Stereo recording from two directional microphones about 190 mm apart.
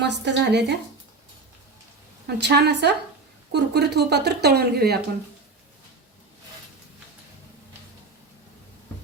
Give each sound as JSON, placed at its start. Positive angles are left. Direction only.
{"t": 0.0, "sound": "speech", "side_deg": -65}
{"t": 2.2, "sound": "speech", "side_deg": -60}